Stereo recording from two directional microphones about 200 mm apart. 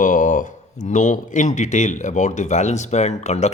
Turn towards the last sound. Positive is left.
turn(degrees=35)  # may be behind; listen again after turning